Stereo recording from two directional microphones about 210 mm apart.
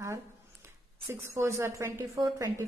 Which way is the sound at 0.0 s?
15° right (ahead or behind).